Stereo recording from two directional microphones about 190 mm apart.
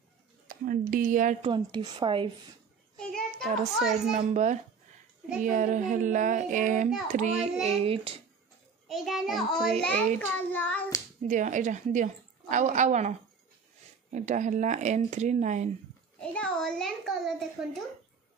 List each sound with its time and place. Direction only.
0.7 s child singing: 45° right (ahead or behind)
1.4 s speech: 25° right (ahead or behind)
3.0 s a sound: 5° left (ahead or behind)
4.2 s a woman's voice: 40° right (ahead or behind)
5.4 s child singing: 40° right (ahead or behind)
7.1 s a woman's voice: 40° right (ahead or behind)
8.8 s a child's voice: centre (ahead or behind)
11.2 s a woman's voice: 40° right (ahead or behind)
14.1 s a woman's voice: 40° right (ahead or behind)
16.2 s a child's voice: 5° left (ahead or behind)